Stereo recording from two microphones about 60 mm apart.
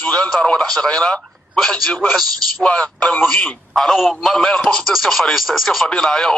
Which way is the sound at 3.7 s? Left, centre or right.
Centre.